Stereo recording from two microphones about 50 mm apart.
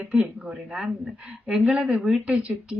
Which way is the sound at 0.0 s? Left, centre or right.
Right.